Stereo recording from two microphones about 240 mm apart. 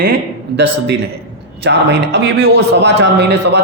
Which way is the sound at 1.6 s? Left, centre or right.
Right.